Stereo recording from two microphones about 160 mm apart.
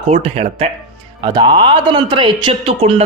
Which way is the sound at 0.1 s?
40° right (ahead or behind).